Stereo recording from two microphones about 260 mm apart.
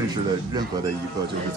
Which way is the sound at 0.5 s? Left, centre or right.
Centre.